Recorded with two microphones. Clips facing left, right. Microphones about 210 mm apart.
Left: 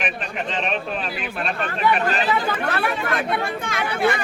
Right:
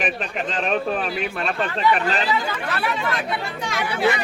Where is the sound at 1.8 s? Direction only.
50° left (ahead or behind).